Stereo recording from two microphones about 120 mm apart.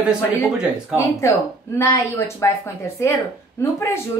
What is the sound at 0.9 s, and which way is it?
A woman's voice, 25° left (ahead or behind).